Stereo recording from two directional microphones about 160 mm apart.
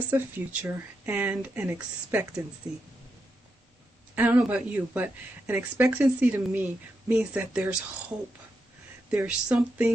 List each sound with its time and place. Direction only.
0.1 s speech: 15° right (ahead or behind)
4.1 s speech: 10° right (ahead or behind)
9.0 s speech: 10° right (ahead or behind)